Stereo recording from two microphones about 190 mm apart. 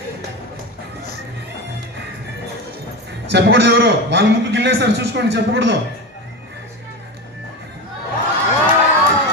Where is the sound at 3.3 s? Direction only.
60° right (ahead or behind).